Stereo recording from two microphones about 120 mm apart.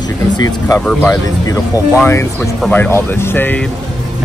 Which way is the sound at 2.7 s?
15° left (ahead or behind).